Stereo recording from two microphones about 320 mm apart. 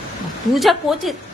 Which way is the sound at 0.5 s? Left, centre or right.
Centre.